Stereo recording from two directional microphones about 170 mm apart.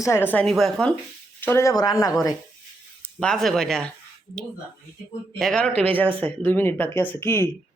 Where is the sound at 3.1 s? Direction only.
5° left (ahead or behind).